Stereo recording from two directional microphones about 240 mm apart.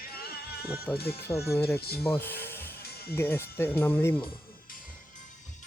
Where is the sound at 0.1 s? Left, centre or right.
Left.